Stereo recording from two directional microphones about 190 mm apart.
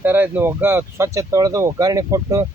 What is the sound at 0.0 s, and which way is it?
Speech, 10° right (ahead or behind).